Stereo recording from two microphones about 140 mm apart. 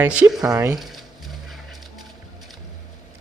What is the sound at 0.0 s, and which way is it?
Speech, 10° right (ahead or behind).